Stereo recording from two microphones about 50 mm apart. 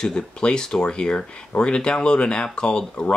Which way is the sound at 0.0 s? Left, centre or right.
Centre.